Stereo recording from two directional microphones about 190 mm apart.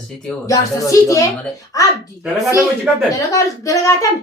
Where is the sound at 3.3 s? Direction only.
15° left (ahead or behind).